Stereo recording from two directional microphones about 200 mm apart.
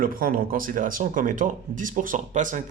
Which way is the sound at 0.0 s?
45° right (ahead or behind).